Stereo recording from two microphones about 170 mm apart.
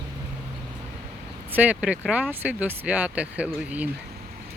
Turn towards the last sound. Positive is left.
turn(degrees=-10)  # may be behind; listen again after turning